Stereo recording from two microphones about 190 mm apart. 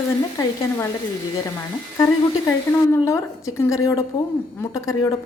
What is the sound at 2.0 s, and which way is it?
A woman's voice, 15° left (ahead or behind).